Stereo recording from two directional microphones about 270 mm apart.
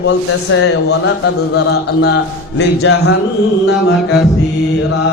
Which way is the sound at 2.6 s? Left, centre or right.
Left.